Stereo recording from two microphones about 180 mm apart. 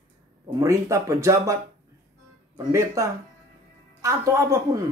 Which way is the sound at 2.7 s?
15° right (ahead or behind).